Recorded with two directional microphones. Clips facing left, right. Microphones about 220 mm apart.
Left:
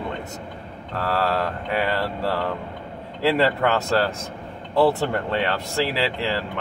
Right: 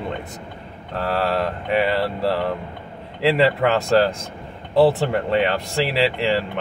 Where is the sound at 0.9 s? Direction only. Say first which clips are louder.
Right 2 dB; 15° right (ahead or behind).